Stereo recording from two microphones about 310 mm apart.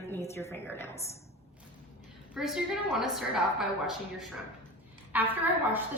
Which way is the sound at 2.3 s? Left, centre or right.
Centre.